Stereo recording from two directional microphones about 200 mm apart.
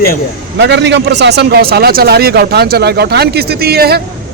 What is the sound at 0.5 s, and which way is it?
A man's voice, 60° right (ahead or behind).